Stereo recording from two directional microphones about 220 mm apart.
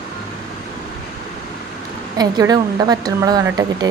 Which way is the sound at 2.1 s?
15° right (ahead or behind).